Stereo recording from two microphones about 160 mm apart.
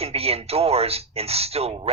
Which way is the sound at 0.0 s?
40° right (ahead or behind).